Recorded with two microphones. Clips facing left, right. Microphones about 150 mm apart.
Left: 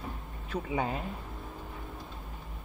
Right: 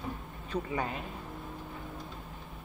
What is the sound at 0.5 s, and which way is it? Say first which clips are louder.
Speech: left 1 dB; 10° left (ahead or behind).